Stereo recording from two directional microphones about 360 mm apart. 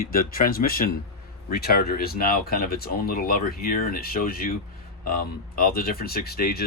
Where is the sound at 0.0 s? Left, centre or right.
Left.